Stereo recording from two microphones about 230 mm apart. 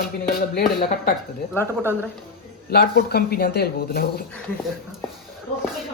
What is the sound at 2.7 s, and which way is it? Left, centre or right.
Speech, left.